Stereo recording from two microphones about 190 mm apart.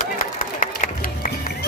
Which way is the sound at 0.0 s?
45° left (ahead or behind).